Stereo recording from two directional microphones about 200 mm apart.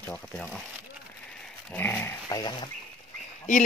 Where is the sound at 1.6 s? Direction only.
10° left (ahead or behind).